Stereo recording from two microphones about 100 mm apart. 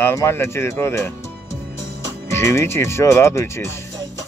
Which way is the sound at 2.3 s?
25° left (ahead or behind).